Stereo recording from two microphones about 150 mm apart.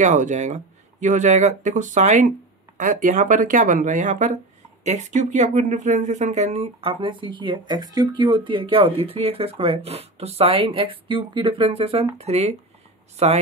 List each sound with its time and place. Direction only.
0.0 s speech: 55° right (ahead or behind)